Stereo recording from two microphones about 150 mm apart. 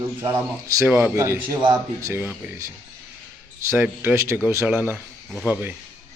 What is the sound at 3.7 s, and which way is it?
A man's voice, 15° right (ahead or behind).